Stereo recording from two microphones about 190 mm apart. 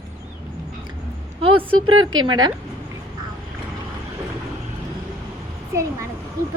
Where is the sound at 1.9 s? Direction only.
90° right.